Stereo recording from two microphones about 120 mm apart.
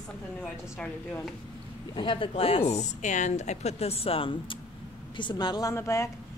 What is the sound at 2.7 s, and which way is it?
A woman's voice, 75° left (ahead or behind).